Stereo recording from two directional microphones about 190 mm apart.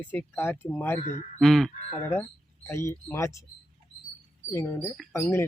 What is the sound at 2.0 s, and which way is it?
Speech, 15° left (ahead or behind).